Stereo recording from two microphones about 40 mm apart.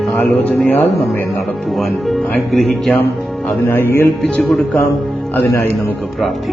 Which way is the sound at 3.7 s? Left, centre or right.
Left.